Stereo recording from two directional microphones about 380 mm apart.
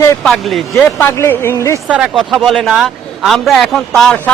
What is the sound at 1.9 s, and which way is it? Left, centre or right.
Speech, centre.